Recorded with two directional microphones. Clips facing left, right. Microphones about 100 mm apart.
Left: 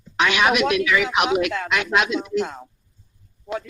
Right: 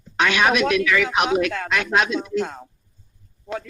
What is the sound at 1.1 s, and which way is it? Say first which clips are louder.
Speech: even; 30° right (ahead or behind).